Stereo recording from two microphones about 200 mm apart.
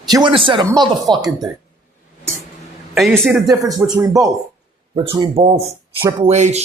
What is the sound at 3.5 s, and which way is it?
Speech, 20° right (ahead or behind).